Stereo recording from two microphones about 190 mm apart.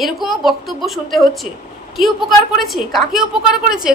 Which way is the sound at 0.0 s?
Centre (ahead or behind).